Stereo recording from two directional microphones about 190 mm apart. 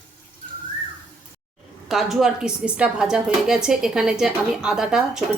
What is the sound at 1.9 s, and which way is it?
A woman's voice, centre (ahead or behind).